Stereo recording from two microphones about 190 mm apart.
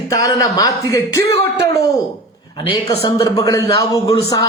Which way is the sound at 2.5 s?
25° left (ahead or behind).